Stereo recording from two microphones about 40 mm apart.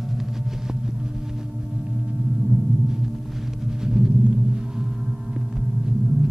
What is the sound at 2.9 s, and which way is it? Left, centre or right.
Music, centre.